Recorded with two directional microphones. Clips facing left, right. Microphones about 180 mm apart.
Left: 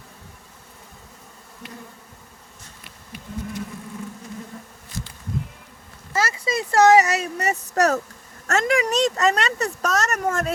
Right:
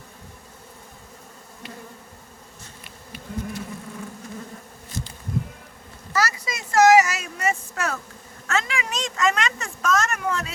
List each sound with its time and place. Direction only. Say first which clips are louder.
4.9 s bee: right 1 dB; 20° right (ahead or behind)
6.1 s speech: left 2 dB; 25° left (ahead or behind); by 10.5 s 45° left (ahead or behind)